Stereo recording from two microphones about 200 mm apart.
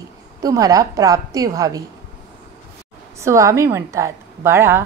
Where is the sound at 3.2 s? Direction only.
15° right (ahead or behind).